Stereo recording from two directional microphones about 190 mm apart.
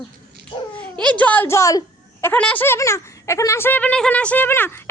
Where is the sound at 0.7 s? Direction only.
5° left (ahead or behind).